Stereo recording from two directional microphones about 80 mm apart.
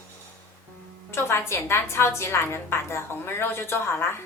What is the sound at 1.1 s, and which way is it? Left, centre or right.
A woman's voice, left.